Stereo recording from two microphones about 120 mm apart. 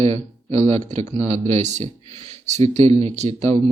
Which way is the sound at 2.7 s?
55° right (ahead or behind).